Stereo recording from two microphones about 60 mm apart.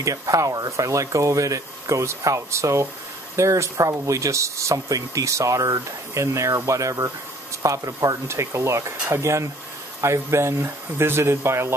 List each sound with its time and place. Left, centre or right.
0.0 s speech: right
8.3 s speech: right